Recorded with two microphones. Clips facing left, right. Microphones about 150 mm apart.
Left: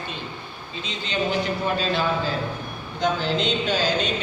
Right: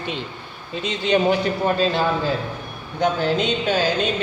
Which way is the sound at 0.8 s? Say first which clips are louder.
Right 8 dB; 70° right (ahead or behind).